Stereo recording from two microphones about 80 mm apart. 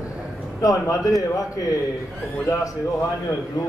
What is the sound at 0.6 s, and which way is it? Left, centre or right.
A man's voice, left.